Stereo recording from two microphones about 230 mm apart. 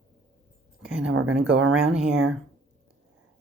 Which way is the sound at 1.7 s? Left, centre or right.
Centre.